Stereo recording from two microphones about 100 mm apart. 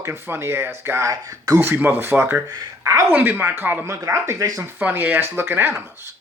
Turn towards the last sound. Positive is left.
turn(degrees=-25)  # may be behind; listen again after turning